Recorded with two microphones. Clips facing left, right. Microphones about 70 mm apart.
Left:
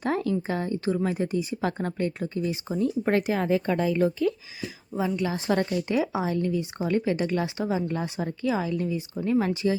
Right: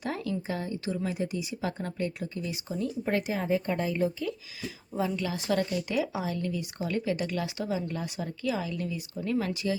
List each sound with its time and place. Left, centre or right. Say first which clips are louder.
0.0 s speech: left 6 dB; left
3.0 s speech: left 4 dB; left
3.7 s a woman's voice: left 5 dB; left
4.9 s a woman's voice: left 3 dB; centre
5.3 s speech: left 3 dB; left